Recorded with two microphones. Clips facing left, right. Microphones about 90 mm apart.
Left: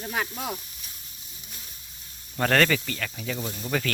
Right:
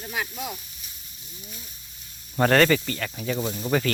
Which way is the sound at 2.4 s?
5° right (ahead or behind).